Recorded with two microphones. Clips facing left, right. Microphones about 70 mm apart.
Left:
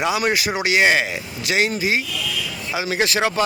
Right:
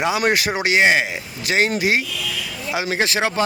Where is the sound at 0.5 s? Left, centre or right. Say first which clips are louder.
Left 1 dB; right.